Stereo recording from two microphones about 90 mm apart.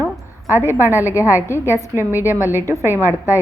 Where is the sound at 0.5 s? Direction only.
30° left (ahead or behind).